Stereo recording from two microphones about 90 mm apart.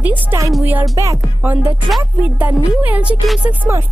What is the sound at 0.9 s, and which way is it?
Speech, 35° right (ahead or behind).